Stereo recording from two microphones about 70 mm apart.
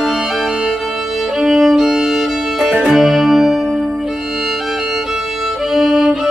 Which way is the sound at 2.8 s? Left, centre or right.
Centre.